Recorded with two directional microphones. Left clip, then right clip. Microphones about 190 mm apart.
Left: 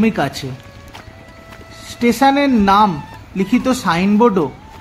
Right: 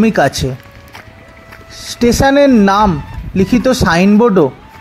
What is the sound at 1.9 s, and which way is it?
Speech, 35° right (ahead or behind).